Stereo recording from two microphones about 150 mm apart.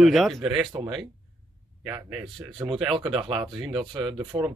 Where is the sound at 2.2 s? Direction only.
30° right (ahead or behind).